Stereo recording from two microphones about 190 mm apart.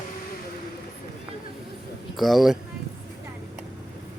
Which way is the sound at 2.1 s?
Centre (ahead or behind).